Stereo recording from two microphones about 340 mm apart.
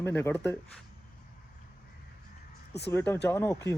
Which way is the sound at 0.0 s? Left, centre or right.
Centre.